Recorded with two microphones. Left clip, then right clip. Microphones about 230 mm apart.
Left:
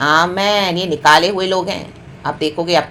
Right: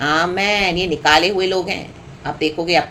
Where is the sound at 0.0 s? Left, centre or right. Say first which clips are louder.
Left 4 dB; centre.